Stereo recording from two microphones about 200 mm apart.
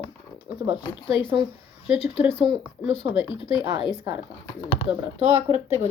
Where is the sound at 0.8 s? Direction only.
25° left (ahead or behind).